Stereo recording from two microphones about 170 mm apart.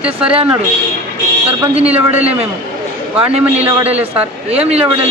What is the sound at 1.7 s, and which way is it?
Speech, 35° right (ahead or behind).